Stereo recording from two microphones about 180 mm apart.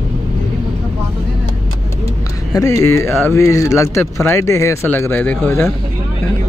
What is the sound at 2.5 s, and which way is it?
Speech, 20° left (ahead or behind).